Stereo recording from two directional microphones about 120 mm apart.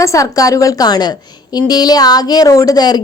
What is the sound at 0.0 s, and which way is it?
A woman's voice, 25° left (ahead or behind).